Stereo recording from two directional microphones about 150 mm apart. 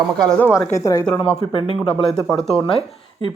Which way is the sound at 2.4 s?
5° left (ahead or behind).